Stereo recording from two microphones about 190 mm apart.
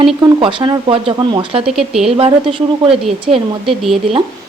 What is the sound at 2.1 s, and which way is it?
Speech, 30° right (ahead or behind).